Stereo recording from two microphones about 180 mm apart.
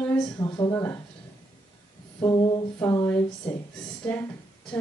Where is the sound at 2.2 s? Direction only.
20° left (ahead or behind).